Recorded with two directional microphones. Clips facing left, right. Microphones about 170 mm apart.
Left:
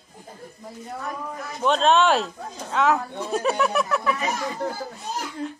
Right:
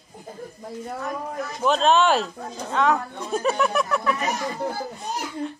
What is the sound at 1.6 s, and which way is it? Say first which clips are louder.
Speech: even; centre (ahead or behind).